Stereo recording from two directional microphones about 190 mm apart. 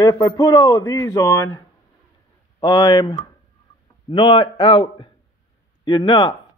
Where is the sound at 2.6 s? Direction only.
25° left (ahead or behind).